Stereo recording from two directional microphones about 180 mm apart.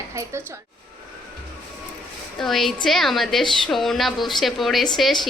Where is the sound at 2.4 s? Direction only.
Centre (ahead or behind).